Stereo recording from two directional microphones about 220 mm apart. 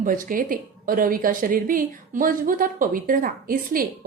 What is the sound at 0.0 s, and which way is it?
A woman's voice, 40° right (ahead or behind).